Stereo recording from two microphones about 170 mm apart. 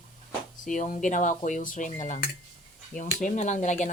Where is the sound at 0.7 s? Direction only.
50° left (ahead or behind).